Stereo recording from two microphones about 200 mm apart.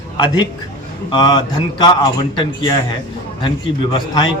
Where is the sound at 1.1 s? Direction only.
20° left (ahead or behind).